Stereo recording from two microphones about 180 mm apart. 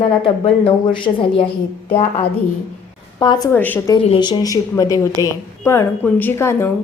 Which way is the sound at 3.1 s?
25° left (ahead or behind).